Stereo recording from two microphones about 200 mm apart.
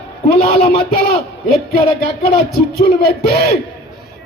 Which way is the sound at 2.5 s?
50° left (ahead or behind).